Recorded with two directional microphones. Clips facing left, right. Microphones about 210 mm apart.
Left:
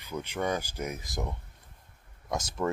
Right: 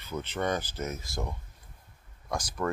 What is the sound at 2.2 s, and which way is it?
Speech, 25° left (ahead or behind).